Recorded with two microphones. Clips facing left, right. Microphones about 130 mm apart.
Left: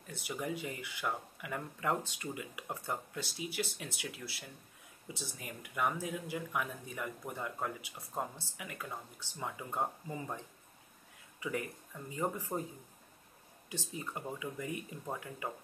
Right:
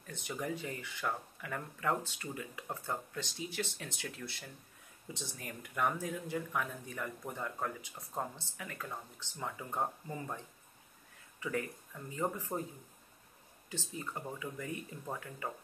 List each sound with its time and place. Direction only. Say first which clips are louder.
0.0 s speech: even; 10° left (ahead or behind)
13.7 s speech: even; 15° left (ahead or behind)